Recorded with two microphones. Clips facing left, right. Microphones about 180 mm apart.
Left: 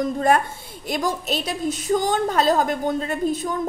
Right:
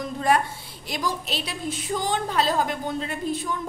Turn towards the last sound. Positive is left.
turn(degrees=45)  # may be behind; listen again after turning